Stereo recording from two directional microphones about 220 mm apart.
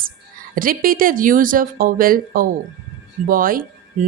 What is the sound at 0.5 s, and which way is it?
A woman's voice, 40° right (ahead or behind).